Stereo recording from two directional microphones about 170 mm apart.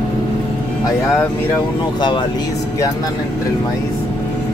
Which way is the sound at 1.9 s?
25° left (ahead or behind).